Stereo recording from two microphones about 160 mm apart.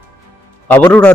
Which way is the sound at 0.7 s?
10° left (ahead or behind).